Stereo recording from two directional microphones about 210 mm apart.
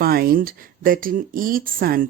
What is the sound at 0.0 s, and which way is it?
Speech, 45° right (ahead or behind).